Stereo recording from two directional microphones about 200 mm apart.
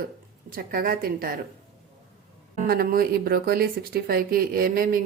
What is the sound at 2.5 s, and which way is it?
A woman's voice, 45° right (ahead or behind).